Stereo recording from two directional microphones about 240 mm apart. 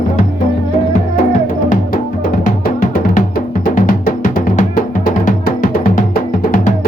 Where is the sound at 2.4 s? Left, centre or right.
Left.